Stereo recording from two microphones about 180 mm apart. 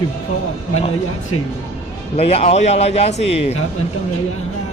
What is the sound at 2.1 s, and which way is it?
Speech, 35° left (ahead or behind).